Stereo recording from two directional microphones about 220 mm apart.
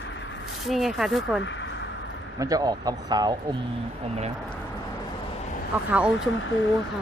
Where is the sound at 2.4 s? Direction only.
15° right (ahead or behind).